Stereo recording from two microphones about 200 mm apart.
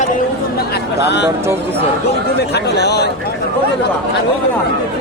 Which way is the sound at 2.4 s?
55° left (ahead or behind).